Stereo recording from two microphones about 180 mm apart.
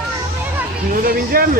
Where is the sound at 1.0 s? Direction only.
55° right (ahead or behind).